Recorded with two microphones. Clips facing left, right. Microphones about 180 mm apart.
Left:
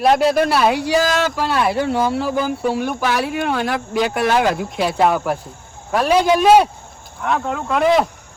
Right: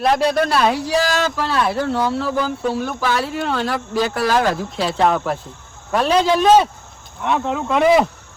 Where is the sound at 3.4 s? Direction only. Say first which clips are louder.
Left 1 dB; 10° left (ahead or behind).